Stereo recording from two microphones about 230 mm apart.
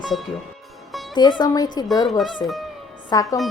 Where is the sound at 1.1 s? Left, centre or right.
Centre.